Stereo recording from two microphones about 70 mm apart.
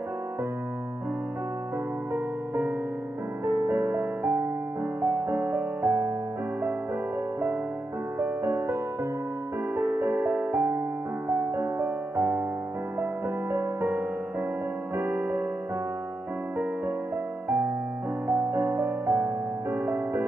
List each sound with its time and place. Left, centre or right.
2.1 s music: right
8.2 s music: right
9.8 s music: right
18.3 s music: right